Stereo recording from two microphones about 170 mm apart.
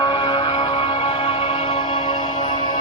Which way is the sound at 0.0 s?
30° left (ahead or behind).